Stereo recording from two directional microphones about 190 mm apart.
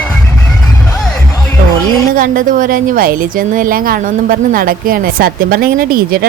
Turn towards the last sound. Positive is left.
turn(degrees=-50)  # may be behind; listen again after turning